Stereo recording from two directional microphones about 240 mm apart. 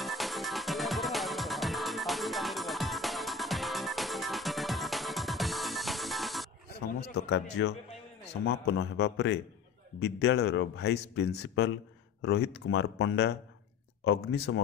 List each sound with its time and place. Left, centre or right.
0.0 s music: centre
6.7 s a sound: left
8.5 s speech: left